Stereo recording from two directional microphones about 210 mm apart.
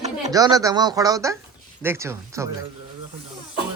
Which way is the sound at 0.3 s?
15° right (ahead or behind).